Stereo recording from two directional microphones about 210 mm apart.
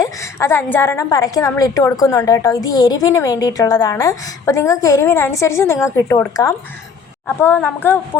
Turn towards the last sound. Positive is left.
turn(degrees=10)  # may be behind; listen again after turning